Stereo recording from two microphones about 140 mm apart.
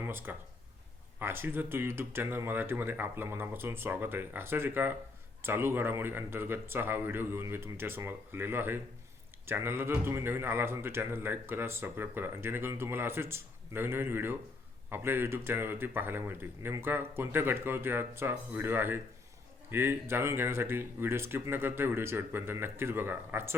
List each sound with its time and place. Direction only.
0.0 s speech: 15° right (ahead or behind)